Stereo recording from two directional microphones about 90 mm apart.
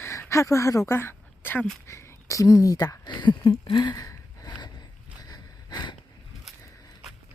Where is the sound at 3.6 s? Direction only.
60° left (ahead or behind).